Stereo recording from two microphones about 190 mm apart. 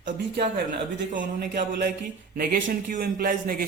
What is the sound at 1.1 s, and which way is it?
Speech, 65° right (ahead or behind).